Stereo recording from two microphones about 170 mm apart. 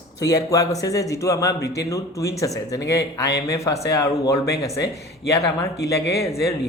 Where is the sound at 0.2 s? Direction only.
20° left (ahead or behind).